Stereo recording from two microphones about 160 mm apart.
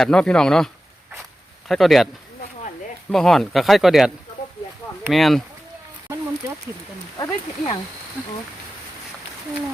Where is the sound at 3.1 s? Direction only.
5° left (ahead or behind).